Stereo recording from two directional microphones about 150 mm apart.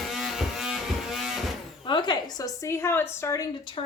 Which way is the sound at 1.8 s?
30° left (ahead or behind).